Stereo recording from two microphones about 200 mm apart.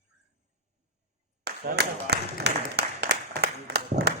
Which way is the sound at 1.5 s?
55° right (ahead or behind).